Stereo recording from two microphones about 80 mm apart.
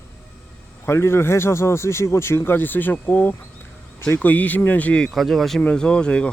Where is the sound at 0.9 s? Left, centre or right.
Left; by 5.1 s centre.